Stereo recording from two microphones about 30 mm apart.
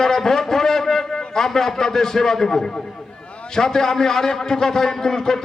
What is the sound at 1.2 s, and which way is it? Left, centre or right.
A man's voice, centre.